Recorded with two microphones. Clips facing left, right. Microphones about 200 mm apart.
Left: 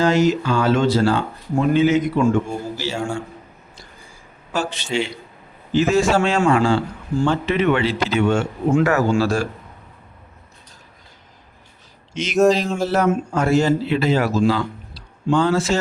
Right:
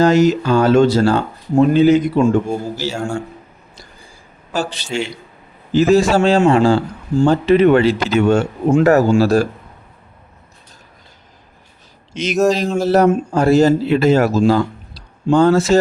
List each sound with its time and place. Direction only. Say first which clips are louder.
0.0 s speech: right 4 dB; 40° right (ahead or behind)
4.5 s speech: right 1 dB; 35° right (ahead or behind)
12.1 s speech: even; 40° right (ahead or behind)